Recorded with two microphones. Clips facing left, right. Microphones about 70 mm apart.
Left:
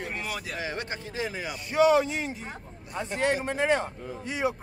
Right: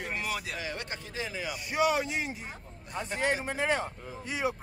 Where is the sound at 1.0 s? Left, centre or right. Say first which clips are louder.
Left 3 dB; left.